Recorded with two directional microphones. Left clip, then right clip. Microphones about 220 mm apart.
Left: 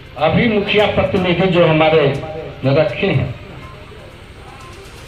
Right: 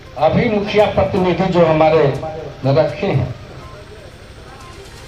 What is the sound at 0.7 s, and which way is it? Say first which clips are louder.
Speech: right 2 dB; 40° left (ahead or behind).